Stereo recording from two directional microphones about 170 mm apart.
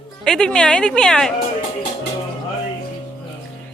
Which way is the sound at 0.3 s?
5° left (ahead or behind).